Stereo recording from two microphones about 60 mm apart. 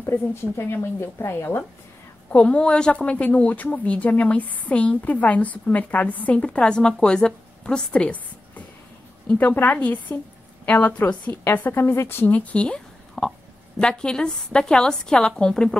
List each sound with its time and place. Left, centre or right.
0.0 s speech: left
2.3 s a woman's voice: left
11.5 s speech: left
12.4 s a woman's voice: centre